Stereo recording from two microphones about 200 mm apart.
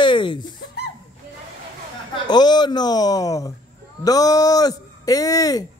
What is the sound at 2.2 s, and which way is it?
Speech, 20° left (ahead or behind).